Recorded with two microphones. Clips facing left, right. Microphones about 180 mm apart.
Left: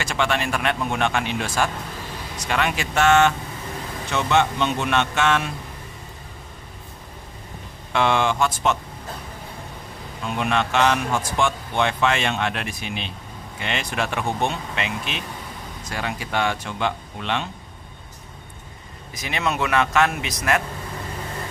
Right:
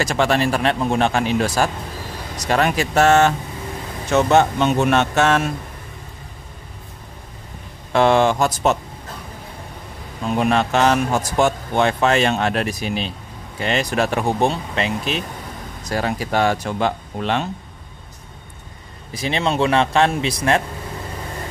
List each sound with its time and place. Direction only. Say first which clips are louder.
0.0 s speech: right 6 dB; 40° right (ahead or behind)
7.9 s speech: right 6 dB; 40° right (ahead or behind)
10.2 s speech: right 5 dB; 40° right (ahead or behind)
19.1 s a man's voice: right 5 dB; 30° right (ahead or behind)